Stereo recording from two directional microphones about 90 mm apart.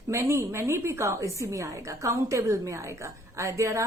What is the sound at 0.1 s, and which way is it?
A woman's voice, 30° right (ahead or behind).